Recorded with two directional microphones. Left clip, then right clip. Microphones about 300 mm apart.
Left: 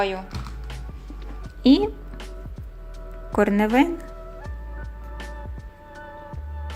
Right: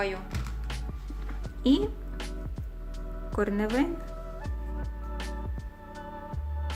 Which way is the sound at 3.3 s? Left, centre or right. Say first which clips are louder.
Left 9 dB; left.